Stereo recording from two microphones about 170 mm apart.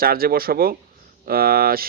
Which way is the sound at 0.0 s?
60° right (ahead or behind).